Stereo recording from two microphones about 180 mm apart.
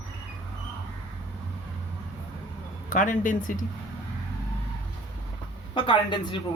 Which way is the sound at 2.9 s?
45° left (ahead or behind).